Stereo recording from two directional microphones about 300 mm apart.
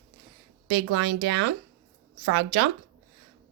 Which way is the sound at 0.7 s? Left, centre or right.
Right.